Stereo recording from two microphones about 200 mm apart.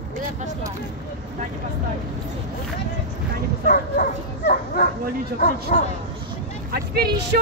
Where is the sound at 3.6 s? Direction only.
45° left (ahead or behind).